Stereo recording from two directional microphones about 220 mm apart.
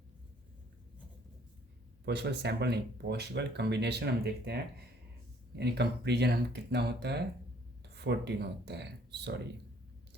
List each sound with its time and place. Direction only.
2.0 s speech: 50° right (ahead or behind)
5.5 s speech: 50° right (ahead or behind)